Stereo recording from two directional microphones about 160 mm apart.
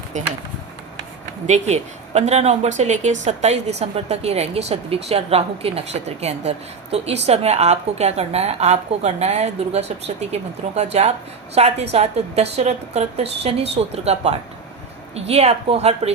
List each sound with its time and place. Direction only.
1.5 s speech: 45° right (ahead or behind)